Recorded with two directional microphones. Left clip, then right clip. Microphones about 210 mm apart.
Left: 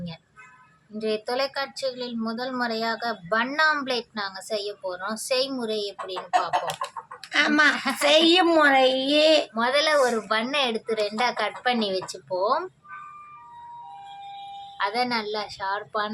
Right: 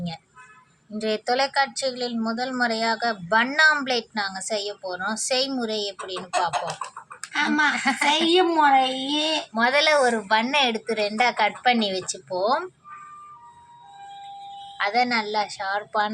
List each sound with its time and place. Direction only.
0.9 s speech: 10° right (ahead or behind)
7.3 s a woman's voice: 35° left (ahead or behind)
7.8 s speech: 10° right (ahead or behind)
8.1 s a woman's voice: 35° left (ahead or behind)
9.6 s speech: 10° right (ahead or behind)
14.8 s speech: 10° right (ahead or behind)